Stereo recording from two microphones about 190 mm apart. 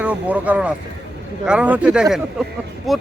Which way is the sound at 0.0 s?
5° right (ahead or behind).